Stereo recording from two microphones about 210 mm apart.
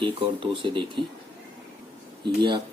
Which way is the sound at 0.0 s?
25° right (ahead or behind).